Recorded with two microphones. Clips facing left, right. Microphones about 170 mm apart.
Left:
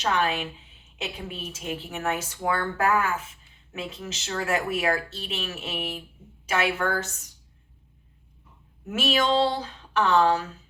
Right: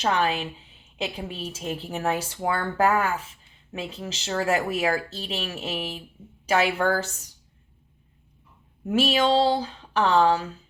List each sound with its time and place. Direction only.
0.0 s speech: 35° right (ahead or behind)
8.9 s speech: 30° right (ahead or behind)